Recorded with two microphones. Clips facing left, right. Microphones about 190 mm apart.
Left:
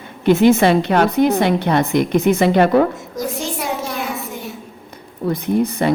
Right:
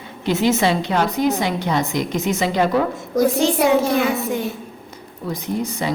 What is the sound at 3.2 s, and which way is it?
Speech, 85° right.